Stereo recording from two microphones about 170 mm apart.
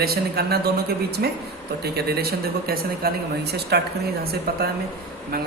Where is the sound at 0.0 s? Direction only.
65° right (ahead or behind).